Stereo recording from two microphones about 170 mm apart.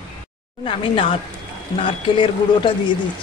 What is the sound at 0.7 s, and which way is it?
Speech, 30° left (ahead or behind).